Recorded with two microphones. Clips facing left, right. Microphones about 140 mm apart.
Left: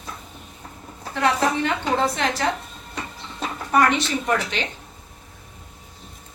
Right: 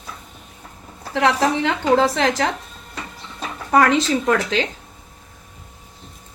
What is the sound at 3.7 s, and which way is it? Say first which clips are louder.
Speech: right 4 dB; 90° right.